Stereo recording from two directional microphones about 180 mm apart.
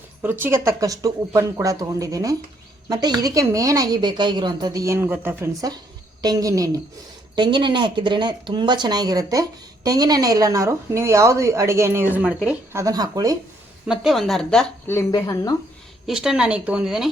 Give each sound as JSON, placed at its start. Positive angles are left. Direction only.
{"t": 0.2, "sound": "speech", "side_deg": -10}
{"t": 12.7, "sound": "speech", "side_deg": -20}
{"t": 13.8, "sound": "speech", "side_deg": 0}
{"t": 14.8, "sound": "speech", "side_deg": 15}
{"t": 16.0, "sound": "speech", "side_deg": -5}